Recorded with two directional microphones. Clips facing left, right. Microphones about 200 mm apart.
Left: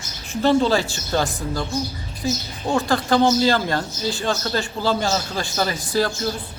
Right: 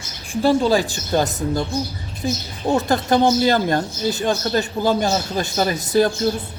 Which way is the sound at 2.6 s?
20° right (ahead or behind).